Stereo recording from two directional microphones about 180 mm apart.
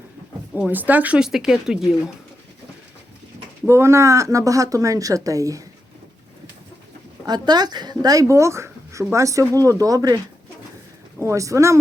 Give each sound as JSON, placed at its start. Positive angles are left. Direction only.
{"t": 0.5, "sound": "speech", "side_deg": -10}
{"t": 3.7, "sound": "speech", "side_deg": -15}
{"t": 7.3, "sound": "speech", "side_deg": -25}
{"t": 11.2, "sound": "speech", "side_deg": -15}